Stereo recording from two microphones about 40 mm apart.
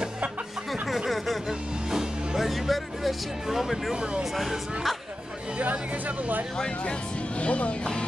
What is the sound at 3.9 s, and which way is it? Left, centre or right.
Speech, right.